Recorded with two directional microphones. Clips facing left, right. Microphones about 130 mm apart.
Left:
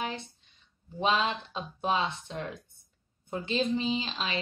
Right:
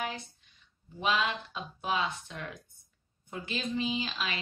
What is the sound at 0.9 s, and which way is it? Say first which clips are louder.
Speech: left 3 dB; 30° left (ahead or behind).